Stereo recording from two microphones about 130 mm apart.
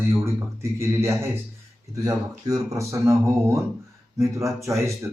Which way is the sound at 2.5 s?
25° right (ahead or behind).